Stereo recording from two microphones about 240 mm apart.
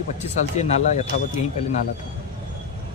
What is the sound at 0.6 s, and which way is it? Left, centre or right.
Speech, left.